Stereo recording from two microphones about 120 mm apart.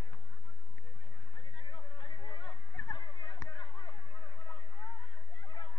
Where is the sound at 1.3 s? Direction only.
40° left (ahead or behind).